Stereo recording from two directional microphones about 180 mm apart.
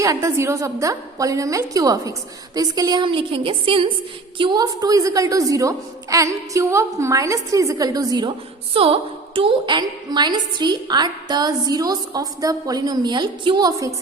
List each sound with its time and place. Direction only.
0.0 s a woman's voice: 20° right (ahead or behind)